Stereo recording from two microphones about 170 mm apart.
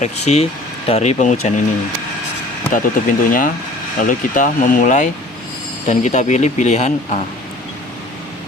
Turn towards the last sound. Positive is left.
turn(degrees=45)  # may be behind; listen again after turning